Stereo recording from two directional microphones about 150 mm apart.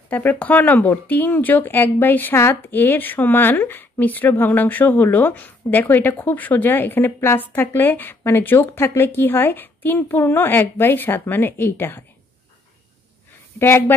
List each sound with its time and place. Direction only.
0.1 s speech: 10° left (ahead or behind)
13.6 s speech: 15° left (ahead or behind)